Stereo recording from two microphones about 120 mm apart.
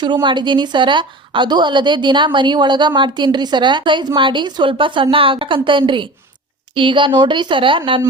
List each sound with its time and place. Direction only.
0.0 s a woman's voice: 40° right (ahead or behind)